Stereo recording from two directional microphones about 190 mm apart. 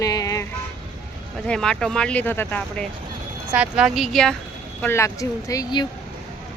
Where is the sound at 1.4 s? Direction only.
5° left (ahead or behind).